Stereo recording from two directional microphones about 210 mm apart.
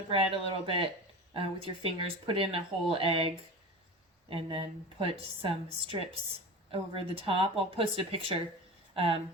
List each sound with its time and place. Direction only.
0.1 s speech: 25° right (ahead or behind)